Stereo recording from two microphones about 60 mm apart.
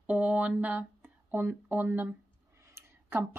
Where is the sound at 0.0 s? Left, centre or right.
Right.